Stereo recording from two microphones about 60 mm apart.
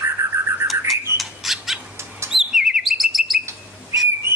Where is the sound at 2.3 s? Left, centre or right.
Centre.